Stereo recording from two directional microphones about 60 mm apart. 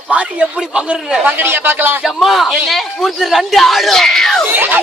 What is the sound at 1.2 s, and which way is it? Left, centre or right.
Speech, right.